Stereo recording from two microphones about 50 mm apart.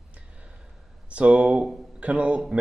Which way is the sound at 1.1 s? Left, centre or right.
Right.